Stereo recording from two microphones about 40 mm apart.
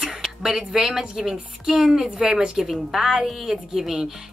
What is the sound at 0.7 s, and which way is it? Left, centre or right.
A woman's voice, centre.